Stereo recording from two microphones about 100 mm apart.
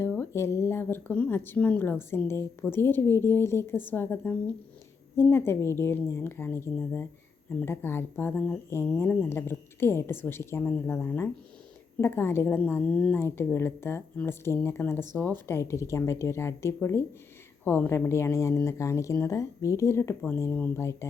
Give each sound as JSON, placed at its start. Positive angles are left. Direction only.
{"t": 0.2, "sound": "a woman's voice", "side_deg": 25}